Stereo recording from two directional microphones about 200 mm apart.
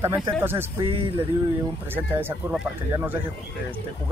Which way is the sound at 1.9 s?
10° right (ahead or behind).